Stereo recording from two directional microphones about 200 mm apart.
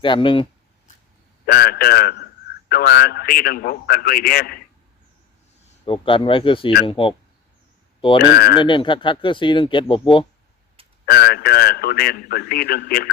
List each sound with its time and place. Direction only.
0.0 s speech: 25° left (ahead or behind)
1.5 s a man's voice: 50° left (ahead or behind)
5.8 s speech: 25° left (ahead or behind)
8.2 s speech: 55° left (ahead or behind)
8.5 s speech: 25° left (ahead or behind)
11.0 s a man's voice: 50° left (ahead or behind)